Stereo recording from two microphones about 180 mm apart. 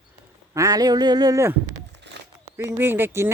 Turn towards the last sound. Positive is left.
turn(degrees=-10)  # may be behind; listen again after turning